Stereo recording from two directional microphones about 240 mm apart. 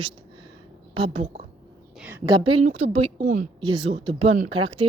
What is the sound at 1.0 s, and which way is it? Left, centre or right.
Speech, right.